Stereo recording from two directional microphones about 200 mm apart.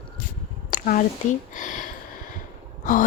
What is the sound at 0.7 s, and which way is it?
Speech, 40° left (ahead or behind).